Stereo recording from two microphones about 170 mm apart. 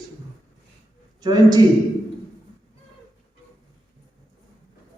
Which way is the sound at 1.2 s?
25° right (ahead or behind).